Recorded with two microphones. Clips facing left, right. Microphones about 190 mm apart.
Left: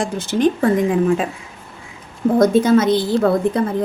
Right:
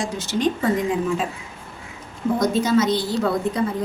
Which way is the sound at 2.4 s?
55° left (ahead or behind).